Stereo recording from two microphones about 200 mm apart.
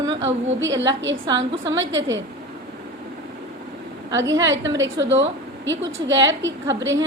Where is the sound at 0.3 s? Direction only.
70° right (ahead or behind).